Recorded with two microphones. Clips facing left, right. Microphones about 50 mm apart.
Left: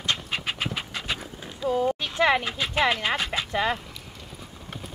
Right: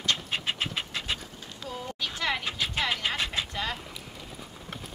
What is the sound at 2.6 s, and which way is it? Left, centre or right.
Speech, left.